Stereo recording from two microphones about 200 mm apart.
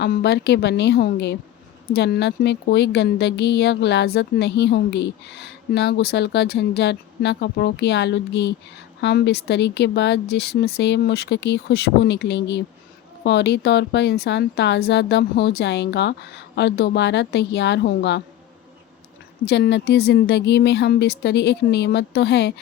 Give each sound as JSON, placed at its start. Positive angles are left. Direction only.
{"t": 0.0, "sound": "a woman's voice", "side_deg": 55}
{"t": 19.5, "sound": "a woman's voice", "side_deg": 55}